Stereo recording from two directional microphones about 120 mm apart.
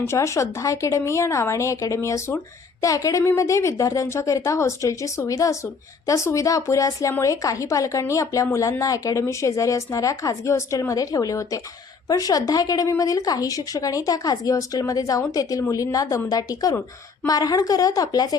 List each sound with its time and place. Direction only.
0.0 s a woman's voice: 25° left (ahead or behind)